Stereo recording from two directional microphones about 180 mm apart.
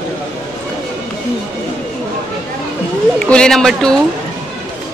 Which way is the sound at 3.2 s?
5° left (ahead or behind).